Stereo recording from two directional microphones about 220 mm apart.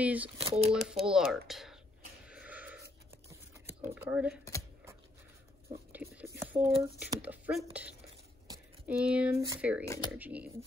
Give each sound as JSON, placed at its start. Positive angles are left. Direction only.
{"t": 0.0, "sound": "speech", "side_deg": -5}
{"t": 0.4, "sound": "speech", "side_deg": -25}
{"t": 0.7, "sound": "speech", "side_deg": 0}
{"t": 1.5, "sound": "whispering", "side_deg": 0}
{"t": 2.2, "sound": "a sound", "side_deg": -5}
{"t": 3.8, "sound": "speech", "side_deg": -10}
{"t": 5.9, "sound": "speech", "side_deg": -5}